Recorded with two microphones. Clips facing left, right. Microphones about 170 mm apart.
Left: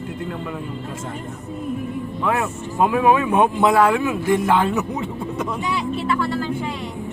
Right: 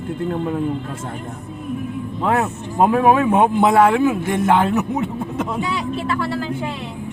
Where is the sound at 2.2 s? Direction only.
40° right (ahead or behind).